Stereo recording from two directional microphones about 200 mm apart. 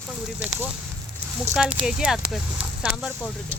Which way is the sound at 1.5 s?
5° right (ahead or behind).